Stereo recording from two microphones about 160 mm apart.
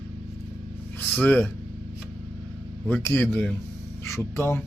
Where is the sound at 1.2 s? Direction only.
10° left (ahead or behind).